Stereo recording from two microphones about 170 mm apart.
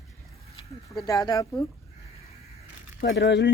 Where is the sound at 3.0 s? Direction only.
85° left.